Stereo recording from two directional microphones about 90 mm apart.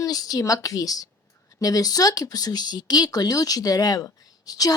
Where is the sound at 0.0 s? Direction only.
45° left (ahead or behind).